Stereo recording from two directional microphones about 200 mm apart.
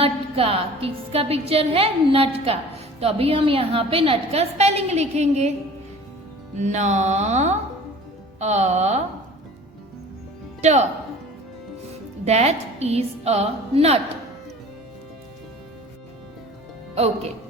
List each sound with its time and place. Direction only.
0.0 s a woman's voice: 30° right (ahead or behind)
6.6 s a woman's voice: 35° right (ahead or behind)
10.6 s speech: 35° right (ahead or behind)
12.2 s a woman's voice: 35° right (ahead or behind)